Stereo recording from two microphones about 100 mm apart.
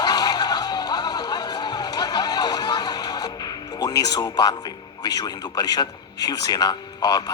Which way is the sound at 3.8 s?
40° left (ahead or behind).